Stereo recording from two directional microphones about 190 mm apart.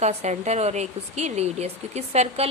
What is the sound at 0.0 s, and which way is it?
Speech, 35° right (ahead or behind).